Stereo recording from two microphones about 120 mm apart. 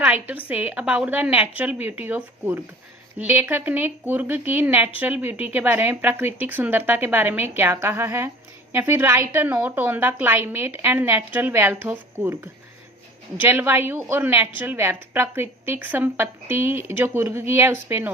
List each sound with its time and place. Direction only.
0.0 s speech: 15° right (ahead or behind)